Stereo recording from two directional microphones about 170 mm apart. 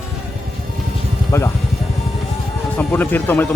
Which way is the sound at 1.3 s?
15° left (ahead or behind).